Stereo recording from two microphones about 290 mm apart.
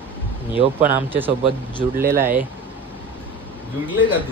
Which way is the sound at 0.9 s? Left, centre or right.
Centre.